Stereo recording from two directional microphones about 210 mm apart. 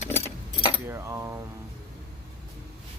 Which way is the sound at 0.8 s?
10° right (ahead or behind).